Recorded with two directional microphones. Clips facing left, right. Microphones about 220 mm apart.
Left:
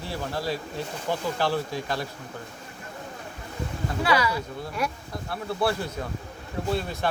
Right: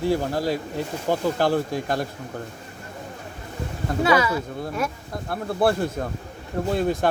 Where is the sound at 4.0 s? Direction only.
25° right (ahead or behind).